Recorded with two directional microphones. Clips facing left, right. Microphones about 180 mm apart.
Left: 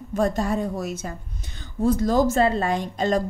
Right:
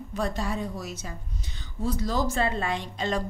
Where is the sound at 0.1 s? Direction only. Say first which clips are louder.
Left 7 dB; 45° left (ahead or behind).